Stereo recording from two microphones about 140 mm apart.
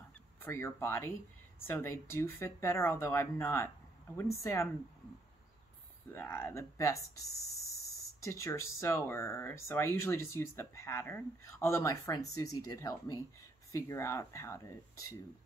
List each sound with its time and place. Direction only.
0.5 s speech: 20° left (ahead or behind)
6.1 s speech: 15° left (ahead or behind)
8.2 s speech: 20° left (ahead or behind)